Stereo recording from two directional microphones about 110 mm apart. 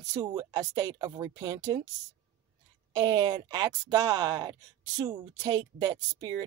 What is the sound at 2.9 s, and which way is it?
Speech, 35° right (ahead or behind).